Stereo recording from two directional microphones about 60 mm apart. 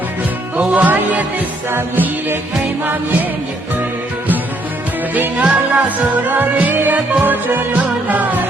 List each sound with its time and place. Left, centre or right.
0.7 s music: right
1.7 s music: right
5.1 s music: right